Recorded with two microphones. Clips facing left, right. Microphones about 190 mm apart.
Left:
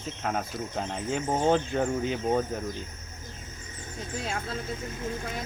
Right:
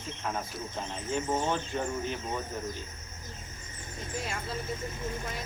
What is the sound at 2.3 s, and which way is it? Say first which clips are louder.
Speech: left 14 dB; 55° left (ahead or behind).